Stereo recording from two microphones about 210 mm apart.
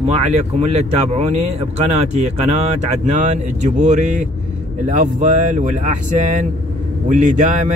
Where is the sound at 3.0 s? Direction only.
35° right (ahead or behind).